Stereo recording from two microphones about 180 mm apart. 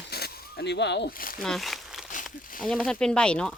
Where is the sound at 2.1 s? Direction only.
45° left (ahead or behind).